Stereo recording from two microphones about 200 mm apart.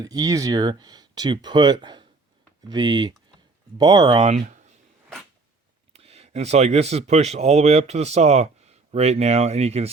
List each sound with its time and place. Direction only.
0.0 s speech: 20° right (ahead or behind)
4.4 s speech: 40° right (ahead or behind)
5.9 s speech: 30° right (ahead or behind)